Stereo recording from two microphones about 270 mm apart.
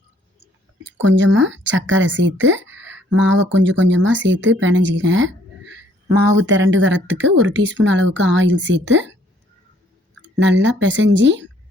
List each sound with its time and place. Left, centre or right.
0.9 s speech: right
10.2 s speech: right